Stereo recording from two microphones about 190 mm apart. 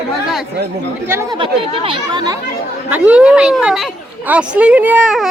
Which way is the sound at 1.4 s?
30° right (ahead or behind).